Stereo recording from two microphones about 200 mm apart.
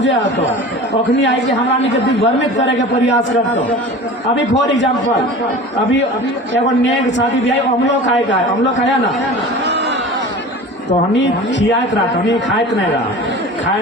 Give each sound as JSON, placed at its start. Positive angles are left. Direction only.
{"t": 0.0, "sound": "a man's voice", "side_deg": 65}
{"t": 6.8, "sound": "a man's voice", "side_deg": 65}